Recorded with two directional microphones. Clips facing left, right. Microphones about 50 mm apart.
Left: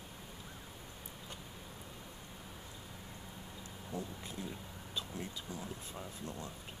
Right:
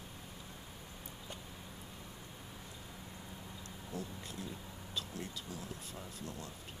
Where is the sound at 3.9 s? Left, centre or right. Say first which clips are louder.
Left 1 dB; centre.